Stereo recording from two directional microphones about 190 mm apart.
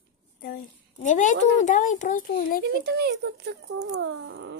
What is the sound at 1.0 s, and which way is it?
A child's voice, 40° left (ahead or behind).